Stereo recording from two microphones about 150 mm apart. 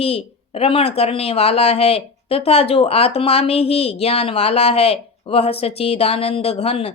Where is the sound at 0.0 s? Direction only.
40° left (ahead or behind).